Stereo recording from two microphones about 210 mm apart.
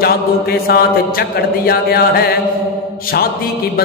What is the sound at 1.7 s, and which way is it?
Chant, 45° left (ahead or behind).